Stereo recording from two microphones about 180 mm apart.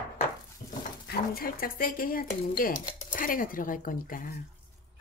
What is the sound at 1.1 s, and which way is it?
Speech, 55° left (ahead or behind).